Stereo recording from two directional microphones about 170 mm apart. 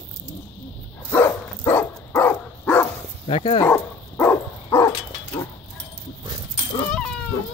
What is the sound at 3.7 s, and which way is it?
Dog, 10° left (ahead or behind).